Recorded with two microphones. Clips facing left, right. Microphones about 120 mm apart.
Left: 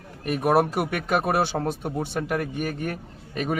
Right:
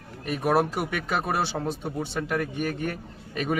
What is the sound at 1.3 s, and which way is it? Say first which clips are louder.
Speech: left 3 dB; 55° left (ahead or behind).